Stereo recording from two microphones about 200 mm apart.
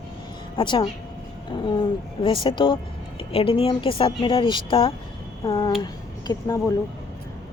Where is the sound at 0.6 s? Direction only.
25° left (ahead or behind).